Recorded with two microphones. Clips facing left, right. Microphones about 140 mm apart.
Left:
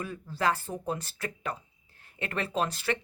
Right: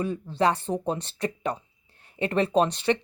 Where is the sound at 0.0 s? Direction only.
30° right (ahead or behind).